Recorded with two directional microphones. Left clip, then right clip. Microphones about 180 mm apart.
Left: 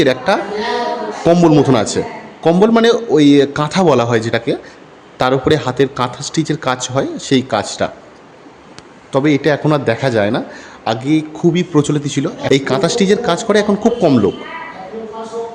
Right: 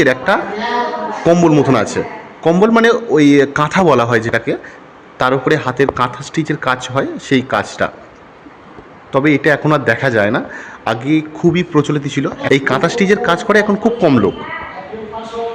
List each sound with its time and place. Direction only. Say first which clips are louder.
0.0 s a man's voice: right 1 dB; 20° left (ahead or behind)
9.1 s a man's voice: right 1 dB; 20° left (ahead or behind)